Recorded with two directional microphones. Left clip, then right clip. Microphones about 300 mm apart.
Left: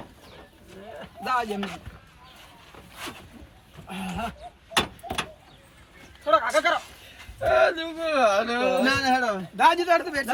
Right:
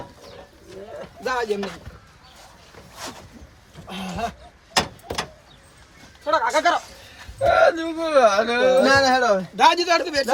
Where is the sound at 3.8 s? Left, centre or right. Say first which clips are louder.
Right 4 dB; right.